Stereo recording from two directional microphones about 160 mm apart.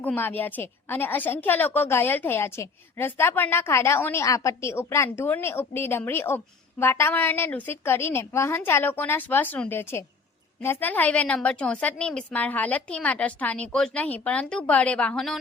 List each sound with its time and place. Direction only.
0.0 s a woman's voice: 10° left (ahead or behind)